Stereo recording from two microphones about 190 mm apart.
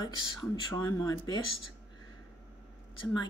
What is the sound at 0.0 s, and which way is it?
Speech, 20° left (ahead or behind).